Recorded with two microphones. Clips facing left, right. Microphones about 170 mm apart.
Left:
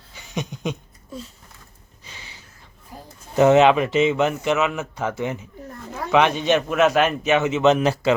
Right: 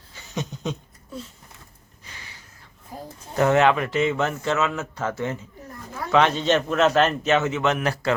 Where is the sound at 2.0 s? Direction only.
25° left (ahead or behind).